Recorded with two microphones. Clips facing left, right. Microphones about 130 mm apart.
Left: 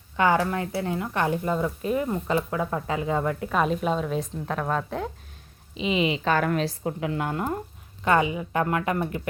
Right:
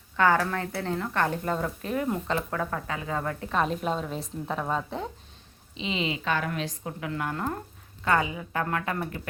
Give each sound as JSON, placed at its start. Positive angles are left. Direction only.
{"t": 0.2, "sound": "speech", "side_deg": 15}
{"t": 3.5, "sound": "a woman's voice", "side_deg": 5}
{"t": 5.8, "sound": "speech", "side_deg": 15}
{"t": 6.4, "sound": "a woman's voice", "side_deg": 50}
{"t": 6.7, "sound": "a woman's voice", "side_deg": 30}